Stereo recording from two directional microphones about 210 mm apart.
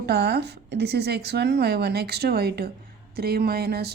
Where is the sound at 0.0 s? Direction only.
50° right (ahead or behind).